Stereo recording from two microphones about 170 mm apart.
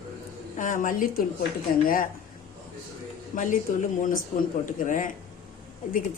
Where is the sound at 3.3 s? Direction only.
50° left (ahead or behind).